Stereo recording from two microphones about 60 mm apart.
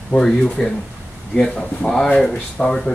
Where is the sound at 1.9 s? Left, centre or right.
Centre.